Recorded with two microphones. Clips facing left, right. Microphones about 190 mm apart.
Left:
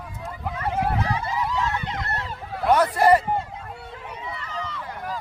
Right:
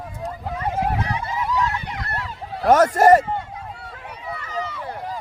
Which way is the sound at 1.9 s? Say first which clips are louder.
Even; 25° left (ahead or behind).